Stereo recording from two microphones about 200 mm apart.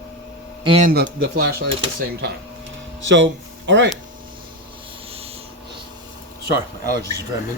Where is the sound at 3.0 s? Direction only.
65° right (ahead or behind).